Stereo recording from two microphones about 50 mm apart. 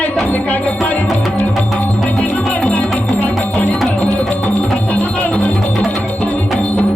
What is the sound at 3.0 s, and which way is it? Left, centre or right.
Music, left.